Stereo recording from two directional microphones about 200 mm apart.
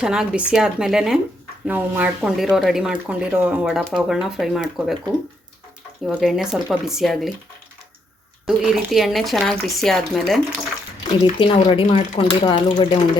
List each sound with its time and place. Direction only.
0.0 s speech: 5° right (ahead or behind)
6.1 s speech: centre (ahead or behind)
8.4 s speech: centre (ahead or behind)
11.2 s speech: 25° left (ahead or behind)